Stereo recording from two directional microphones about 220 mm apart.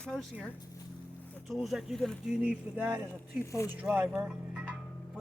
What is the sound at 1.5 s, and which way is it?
Speech, centre (ahead or behind).